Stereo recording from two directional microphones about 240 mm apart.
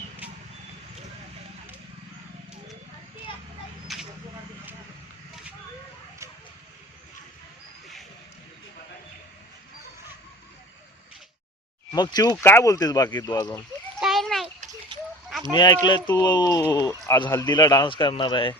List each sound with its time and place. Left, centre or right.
3.9 s vehicle: centre
11.9 s speech: centre
14.0 s splash: centre
15.5 s a man's voice: centre